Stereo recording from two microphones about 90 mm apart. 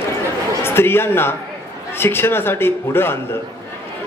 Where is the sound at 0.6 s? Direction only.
25° left (ahead or behind).